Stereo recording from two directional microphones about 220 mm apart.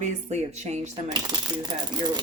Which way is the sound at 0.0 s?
30° right (ahead or behind).